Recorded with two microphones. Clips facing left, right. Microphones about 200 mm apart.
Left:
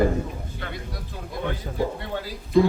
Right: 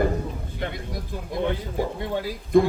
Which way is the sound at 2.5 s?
55° right (ahead or behind).